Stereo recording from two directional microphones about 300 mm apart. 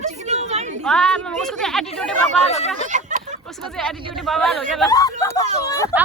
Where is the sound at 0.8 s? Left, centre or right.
Centre.